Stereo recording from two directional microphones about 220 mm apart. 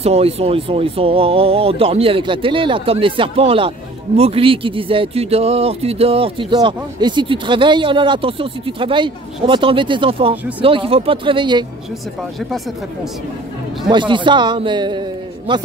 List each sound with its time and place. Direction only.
0.0 s speech: 25° right (ahead or behind)
13.8 s speech: 20° right (ahead or behind)